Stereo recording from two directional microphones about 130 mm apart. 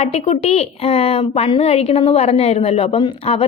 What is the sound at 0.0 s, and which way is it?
Speech, 55° left (ahead or behind).